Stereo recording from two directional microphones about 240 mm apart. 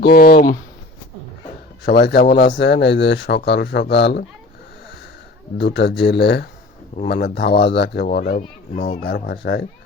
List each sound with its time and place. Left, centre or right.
0.0 s speech: left
1.8 s speech: left
5.5 s speech: left